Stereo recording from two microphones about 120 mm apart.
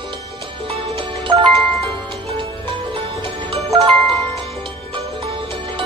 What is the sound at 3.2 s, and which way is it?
Music, 50° right (ahead or behind).